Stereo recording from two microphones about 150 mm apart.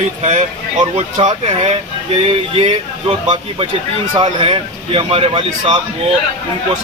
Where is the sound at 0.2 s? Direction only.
45° right (ahead or behind).